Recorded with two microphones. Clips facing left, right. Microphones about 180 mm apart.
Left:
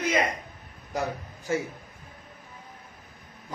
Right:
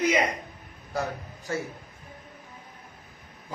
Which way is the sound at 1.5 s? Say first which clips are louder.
Left 3 dB; 15° left (ahead or behind).